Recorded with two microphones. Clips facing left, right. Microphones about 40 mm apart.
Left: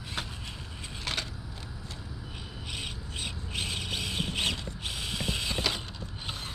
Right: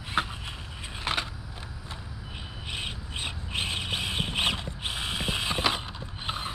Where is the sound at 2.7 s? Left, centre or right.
Right.